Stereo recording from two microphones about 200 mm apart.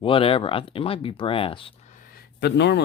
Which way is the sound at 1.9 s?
45° left (ahead or behind).